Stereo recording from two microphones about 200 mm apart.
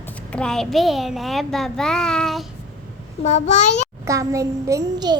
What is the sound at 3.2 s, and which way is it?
Speech, 35° left (ahead or behind).